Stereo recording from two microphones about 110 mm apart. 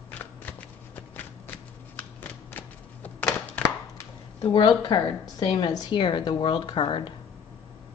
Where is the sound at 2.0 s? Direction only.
15° left (ahead or behind).